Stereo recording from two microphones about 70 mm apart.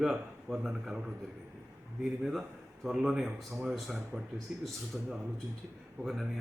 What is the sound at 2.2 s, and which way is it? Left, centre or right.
A man's voice, centre.